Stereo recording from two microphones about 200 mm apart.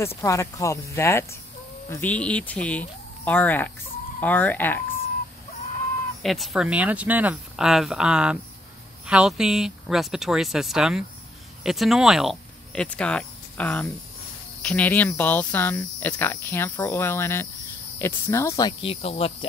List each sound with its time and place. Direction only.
0.2 s speech: 15° left (ahead or behind)
6.2 s speech: centre (ahead or behind); by 19.3 s 30° left (ahead or behind)